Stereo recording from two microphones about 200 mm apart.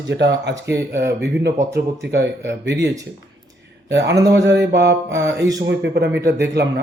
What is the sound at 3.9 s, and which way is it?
Speech, 60° right (ahead or behind).